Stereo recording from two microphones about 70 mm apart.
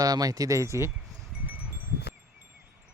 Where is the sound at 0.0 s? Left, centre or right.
Right.